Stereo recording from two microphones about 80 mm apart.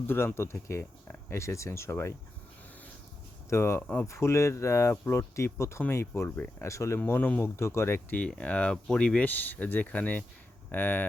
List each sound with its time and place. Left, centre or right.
0.3 s speech: left
3.5 s speech: left
3.8 s speech: centre
4.0 s speech: left
7.1 s speech: left
7.4 s speech: left
8.1 s speech: centre